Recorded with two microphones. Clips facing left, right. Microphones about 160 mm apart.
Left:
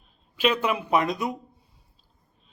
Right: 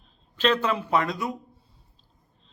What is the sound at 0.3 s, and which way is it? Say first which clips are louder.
A man's voice: even; 10° left (ahead or behind).